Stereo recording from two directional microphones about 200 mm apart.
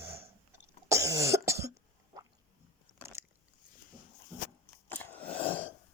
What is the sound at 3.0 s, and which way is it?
Biting, 15° right (ahead or behind).